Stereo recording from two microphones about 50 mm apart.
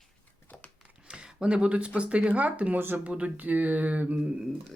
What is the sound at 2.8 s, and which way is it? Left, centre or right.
Speech, right.